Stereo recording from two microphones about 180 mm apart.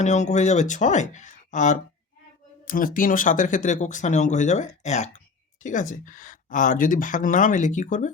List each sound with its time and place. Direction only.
0.0 s speech: 40° left (ahead or behind)